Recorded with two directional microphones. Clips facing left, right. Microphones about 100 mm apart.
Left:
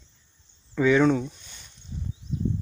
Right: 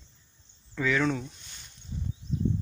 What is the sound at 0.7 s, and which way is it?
Speech, 20° left (ahead or behind).